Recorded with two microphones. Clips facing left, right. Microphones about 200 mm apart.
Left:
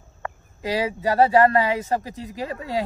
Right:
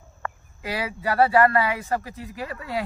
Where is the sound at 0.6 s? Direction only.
15° left (ahead or behind).